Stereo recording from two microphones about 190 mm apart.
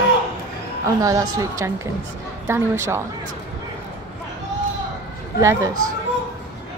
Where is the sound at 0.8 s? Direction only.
15° right (ahead or behind).